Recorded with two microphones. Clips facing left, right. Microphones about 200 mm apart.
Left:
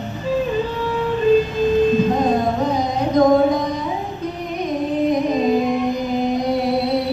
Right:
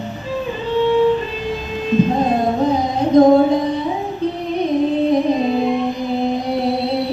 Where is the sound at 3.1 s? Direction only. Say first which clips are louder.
Right 4 dB; 30° right (ahead or behind).